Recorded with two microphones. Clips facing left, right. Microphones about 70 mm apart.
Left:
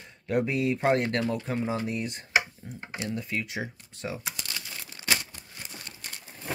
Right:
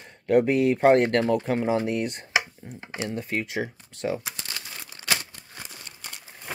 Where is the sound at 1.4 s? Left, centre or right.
Right.